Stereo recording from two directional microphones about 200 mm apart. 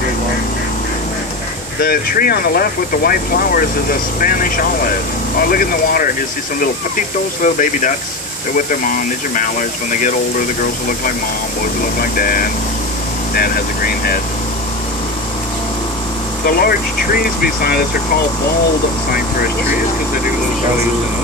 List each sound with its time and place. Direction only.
1.8 s speech: 50° left (ahead or behind)
7.4 s speech: 40° left (ahead or behind)
12.0 s speech: 45° left (ahead or behind)
16.4 s speech: 50° left (ahead or behind)
19.1 s speech: 45° left (ahead or behind)